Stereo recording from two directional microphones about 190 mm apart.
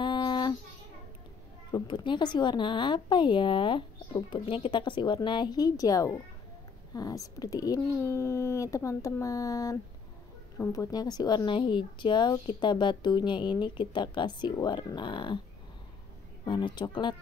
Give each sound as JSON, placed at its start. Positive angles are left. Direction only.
{"t": 0.0, "sound": "a sound", "side_deg": 25}
{"t": 1.7, "sound": "a woman's voice", "side_deg": 25}
{"t": 16.4, "sound": "a woman's voice", "side_deg": 25}